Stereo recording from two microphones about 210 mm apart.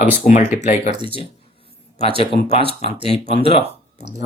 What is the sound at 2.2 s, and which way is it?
Speech, 25° left (ahead or behind).